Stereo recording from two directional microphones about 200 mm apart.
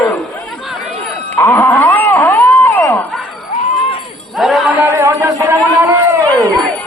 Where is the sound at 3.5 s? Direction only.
35° left (ahead or behind).